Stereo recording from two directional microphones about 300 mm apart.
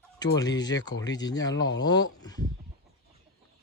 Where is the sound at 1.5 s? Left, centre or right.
Left.